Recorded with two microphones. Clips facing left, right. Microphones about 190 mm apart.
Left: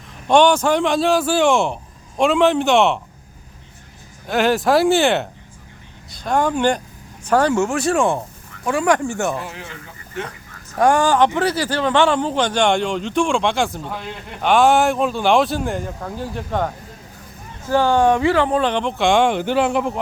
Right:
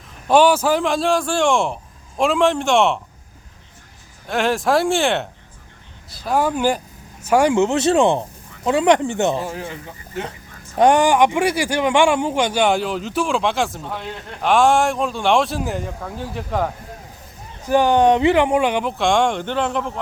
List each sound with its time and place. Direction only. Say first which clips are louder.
0.3 s speech: even; 5° right (ahead or behind)
4.3 s speech: left 2 dB; centre (ahead or behind); by 9.4 s 20° right (ahead or behind)
9.4 s speech: right 5 dB; 40° right (ahead or behind)
10.8 s speech: right 1 dB; 20° right (ahead or behind); by 16.7 s centre (ahead or behind)
17.7 s speech: right 1 dB; 15° right (ahead or behind); by 20.0 s 10° left (ahead or behind)